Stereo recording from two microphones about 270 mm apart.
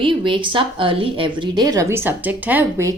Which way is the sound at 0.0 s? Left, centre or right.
Centre.